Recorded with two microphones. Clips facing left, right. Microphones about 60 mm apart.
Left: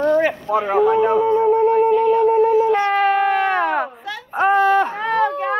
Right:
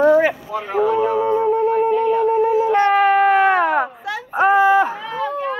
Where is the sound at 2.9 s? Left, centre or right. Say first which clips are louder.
Right 3 dB; centre.